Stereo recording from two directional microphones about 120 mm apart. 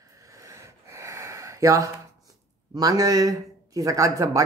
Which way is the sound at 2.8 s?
30° right (ahead or behind).